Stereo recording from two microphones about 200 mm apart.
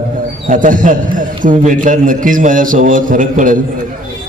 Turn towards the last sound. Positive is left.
turn(degrees=-40)  # may be behind; listen again after turning